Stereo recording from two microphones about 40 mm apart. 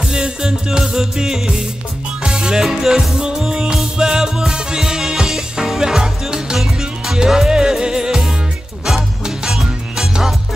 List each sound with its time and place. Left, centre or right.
0.0 s music: centre
9.9 s music: centre